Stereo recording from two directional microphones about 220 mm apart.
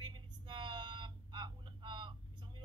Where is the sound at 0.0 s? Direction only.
20° right (ahead or behind).